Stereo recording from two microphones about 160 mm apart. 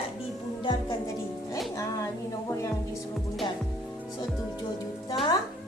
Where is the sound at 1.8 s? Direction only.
20° left (ahead or behind).